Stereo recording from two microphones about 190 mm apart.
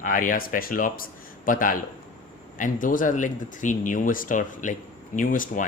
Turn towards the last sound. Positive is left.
turn(degrees=45)  # may be behind; listen again after turning